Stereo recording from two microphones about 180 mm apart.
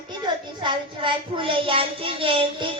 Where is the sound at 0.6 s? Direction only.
30° right (ahead or behind).